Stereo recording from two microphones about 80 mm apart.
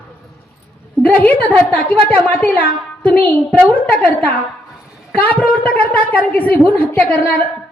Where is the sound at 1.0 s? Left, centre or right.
Centre.